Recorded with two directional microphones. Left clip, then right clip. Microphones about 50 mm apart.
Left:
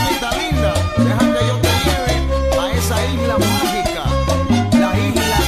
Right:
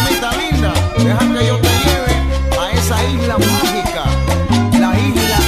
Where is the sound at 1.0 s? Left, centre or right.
Left.